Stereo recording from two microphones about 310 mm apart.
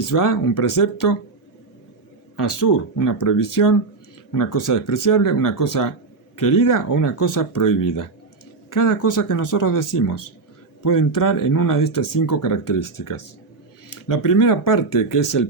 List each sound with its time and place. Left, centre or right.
0.0 s speech: left
2.3 s speech: left
8.7 s speech: left